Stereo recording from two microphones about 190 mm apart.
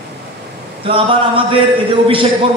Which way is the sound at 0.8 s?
30° right (ahead or behind).